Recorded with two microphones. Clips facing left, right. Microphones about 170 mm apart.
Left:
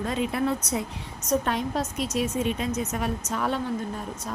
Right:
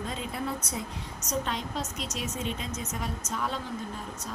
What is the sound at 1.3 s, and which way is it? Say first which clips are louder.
A woman's voice: left 7 dB; 55° left (ahead or behind).